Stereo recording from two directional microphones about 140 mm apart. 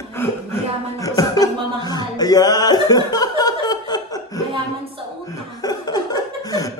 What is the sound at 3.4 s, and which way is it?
Chuckle, 30° left (ahead or behind).